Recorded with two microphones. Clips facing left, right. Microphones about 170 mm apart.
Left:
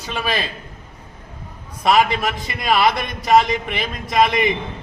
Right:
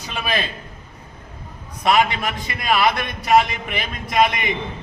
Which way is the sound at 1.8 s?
Centre (ahead or behind).